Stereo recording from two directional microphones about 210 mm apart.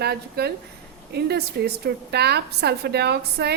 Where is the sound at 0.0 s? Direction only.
50° right (ahead or behind).